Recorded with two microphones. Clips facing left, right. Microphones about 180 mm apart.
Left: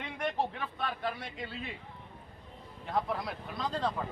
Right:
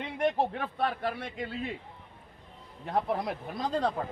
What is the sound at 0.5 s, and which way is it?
Speech, 45° right (ahead or behind).